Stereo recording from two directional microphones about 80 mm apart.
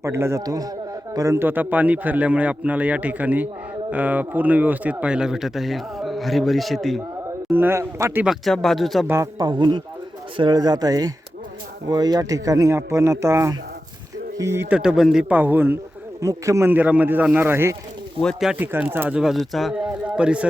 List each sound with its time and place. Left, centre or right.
0.0 s a man's voice: right
1.4 s a man's voice: right; by 7.0 s centre
7.5 s a man's voice: right
7.8 s speech: right
8.4 s speech: centre
9.0 s speech: right
9.4 s speech: right
14.7 s a man's voice: centre
15.3 s a man's voice: right
16.2 s speech: right
16.6 s a man's voice: centre
19.1 s speech: centre
19.7 s a man's voice: centre